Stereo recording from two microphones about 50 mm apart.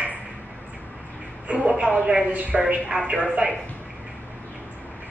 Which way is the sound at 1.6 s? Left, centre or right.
Right.